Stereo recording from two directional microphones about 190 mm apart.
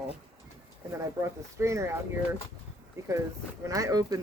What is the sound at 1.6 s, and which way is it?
Speech, 15° right (ahead or behind).